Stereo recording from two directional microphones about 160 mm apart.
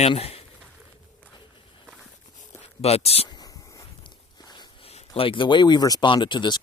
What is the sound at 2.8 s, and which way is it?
Speech, 40° left (ahead or behind).